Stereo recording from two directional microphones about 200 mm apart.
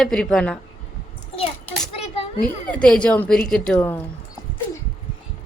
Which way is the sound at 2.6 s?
5° left (ahead or behind).